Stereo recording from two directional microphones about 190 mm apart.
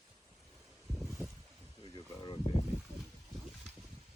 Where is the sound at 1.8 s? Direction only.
25° left (ahead or behind).